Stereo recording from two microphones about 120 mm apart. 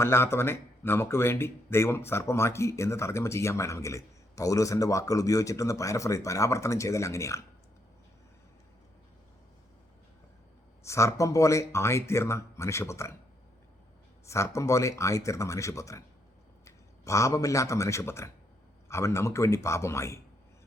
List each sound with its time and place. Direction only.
0.0 s speech: 20° left (ahead or behind)
10.8 s speech: 25° left (ahead or behind)
14.3 s a man's voice: 25° left (ahead or behind)